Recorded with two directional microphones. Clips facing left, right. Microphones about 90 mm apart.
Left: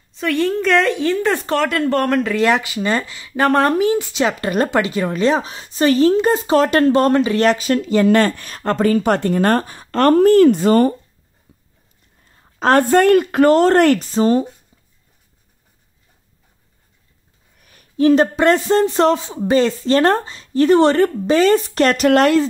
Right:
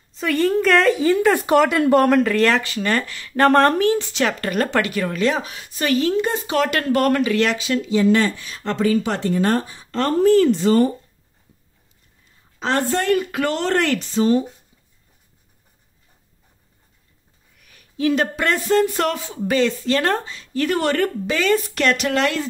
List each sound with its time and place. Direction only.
0.1 s speech: centre (ahead or behind)
2.4 s speech: 15° left (ahead or behind)
7.3 s speech: 40° left (ahead or behind)
12.3 s a woman's voice: 55° left (ahead or behind)
13.3 s speech: 40° left (ahead or behind)
17.6 s a man's voice: 40° left (ahead or behind)
19.5 s speech: 35° left (ahead or behind)